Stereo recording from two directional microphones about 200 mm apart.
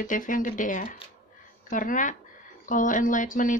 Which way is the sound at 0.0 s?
40° left (ahead or behind).